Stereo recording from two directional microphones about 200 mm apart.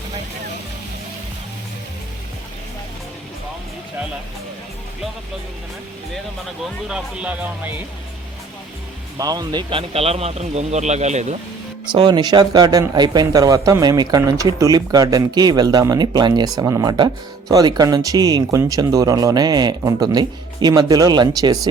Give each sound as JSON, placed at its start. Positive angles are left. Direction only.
{"t": 6.7, "sound": "speech", "side_deg": -5}
{"t": 9.1, "sound": "speech", "side_deg": -20}
{"t": 11.9, "sound": "speech", "side_deg": -25}